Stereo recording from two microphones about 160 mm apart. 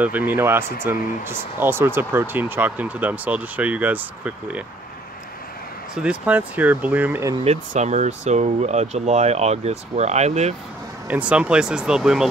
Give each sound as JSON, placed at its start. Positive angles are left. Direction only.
{"t": 0.0, "sound": "speech", "side_deg": -10}
{"t": 6.0, "sound": "speech", "side_deg": -10}
{"t": 7.4, "sound": "speech", "side_deg": -45}
{"t": 11.1, "sound": "speech", "side_deg": -10}